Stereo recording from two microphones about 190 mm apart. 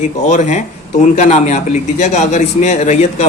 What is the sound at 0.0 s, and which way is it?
Speech, 40° left (ahead or behind).